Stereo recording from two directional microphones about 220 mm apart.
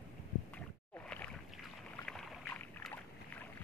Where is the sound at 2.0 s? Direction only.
5° left (ahead or behind).